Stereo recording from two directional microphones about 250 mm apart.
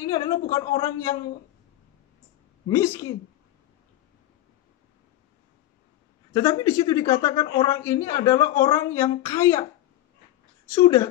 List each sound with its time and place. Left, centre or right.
0.0 s speech: centre
2.7 s speech: centre
6.3 s speech: centre
10.7 s speech: centre